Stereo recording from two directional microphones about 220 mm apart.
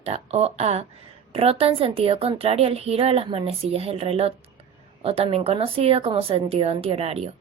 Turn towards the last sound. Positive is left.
turn(degrees=-25)  # may be behind; listen again after turning